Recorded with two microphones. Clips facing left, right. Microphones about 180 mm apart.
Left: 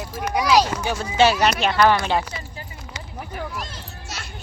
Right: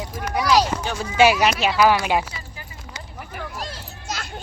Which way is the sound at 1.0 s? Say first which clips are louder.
Right 1 dB; 10° right (ahead or behind).